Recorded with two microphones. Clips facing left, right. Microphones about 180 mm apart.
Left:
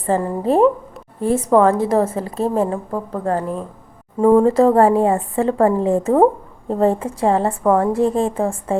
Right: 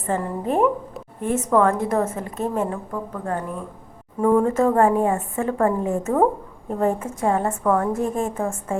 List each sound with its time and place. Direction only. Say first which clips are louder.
0.0 s a woman's voice: left 6 dB; 35° left (ahead or behind)